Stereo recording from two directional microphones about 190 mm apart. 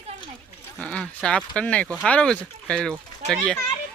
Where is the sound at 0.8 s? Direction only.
5° left (ahead or behind).